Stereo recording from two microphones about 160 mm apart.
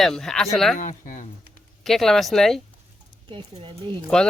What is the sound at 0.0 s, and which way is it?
Speech, 5° left (ahead or behind).